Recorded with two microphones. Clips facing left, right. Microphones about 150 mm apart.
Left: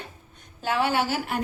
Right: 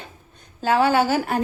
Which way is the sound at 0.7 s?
40° right (ahead or behind).